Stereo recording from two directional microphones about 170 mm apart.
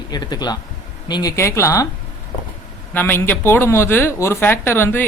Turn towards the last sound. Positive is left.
turn(degrees=15)  # may be behind; listen again after turning